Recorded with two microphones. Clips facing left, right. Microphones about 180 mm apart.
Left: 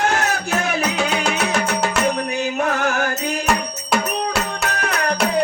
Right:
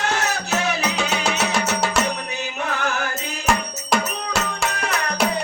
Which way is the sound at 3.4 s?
Centre (ahead or behind).